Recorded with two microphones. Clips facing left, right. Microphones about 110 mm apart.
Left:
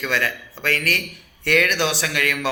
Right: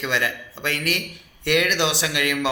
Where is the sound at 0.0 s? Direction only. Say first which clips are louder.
Left 1 dB; 20° right (ahead or behind).